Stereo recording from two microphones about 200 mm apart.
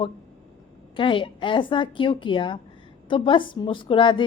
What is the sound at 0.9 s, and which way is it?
A woman's voice, 25° left (ahead or behind).